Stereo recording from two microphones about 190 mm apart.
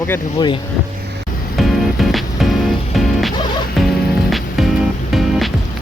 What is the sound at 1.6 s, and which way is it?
Music, centre (ahead or behind).